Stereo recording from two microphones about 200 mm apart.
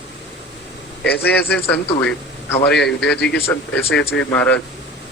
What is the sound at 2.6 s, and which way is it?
Speech, 55° left (ahead or behind).